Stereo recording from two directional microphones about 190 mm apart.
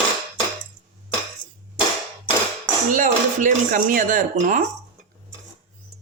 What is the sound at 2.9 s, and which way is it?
Speech, 45° right (ahead or behind).